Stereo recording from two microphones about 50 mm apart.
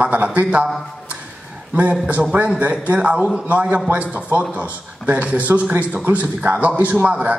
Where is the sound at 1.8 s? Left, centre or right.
Right.